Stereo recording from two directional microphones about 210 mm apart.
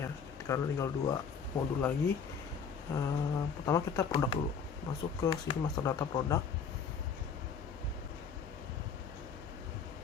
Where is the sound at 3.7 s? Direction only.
15° left (ahead or behind).